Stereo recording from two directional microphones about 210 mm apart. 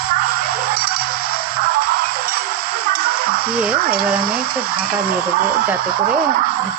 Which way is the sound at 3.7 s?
45° right (ahead or behind).